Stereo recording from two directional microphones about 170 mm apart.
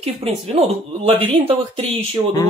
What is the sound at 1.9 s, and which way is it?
Speech, 20° left (ahead or behind).